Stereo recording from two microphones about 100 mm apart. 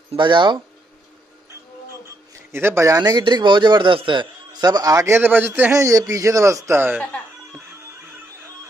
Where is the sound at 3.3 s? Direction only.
55° right (ahead or behind); by 5.2 s 35° right (ahead or behind).